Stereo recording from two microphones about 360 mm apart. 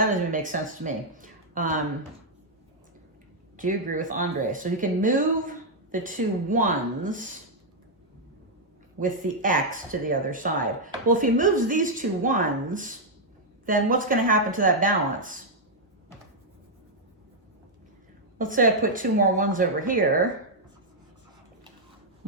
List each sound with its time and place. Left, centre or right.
0.0 s speech: right
3.6 s speech: right
9.0 s speech: right
18.3 s speech: right